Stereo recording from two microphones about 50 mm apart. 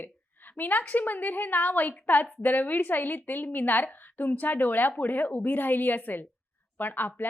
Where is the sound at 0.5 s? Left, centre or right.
Left.